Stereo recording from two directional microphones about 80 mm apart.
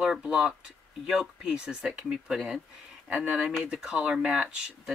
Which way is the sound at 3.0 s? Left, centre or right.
Centre.